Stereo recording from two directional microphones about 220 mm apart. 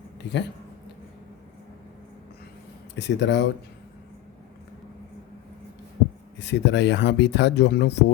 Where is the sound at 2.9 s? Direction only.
50° left (ahead or behind).